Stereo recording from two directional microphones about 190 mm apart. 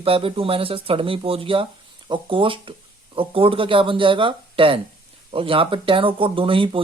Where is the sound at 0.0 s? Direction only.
30° right (ahead or behind).